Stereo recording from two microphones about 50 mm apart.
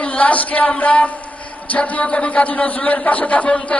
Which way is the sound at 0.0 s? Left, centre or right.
Left.